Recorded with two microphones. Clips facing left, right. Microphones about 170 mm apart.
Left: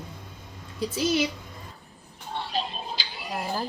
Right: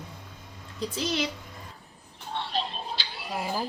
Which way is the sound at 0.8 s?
5° left (ahead or behind).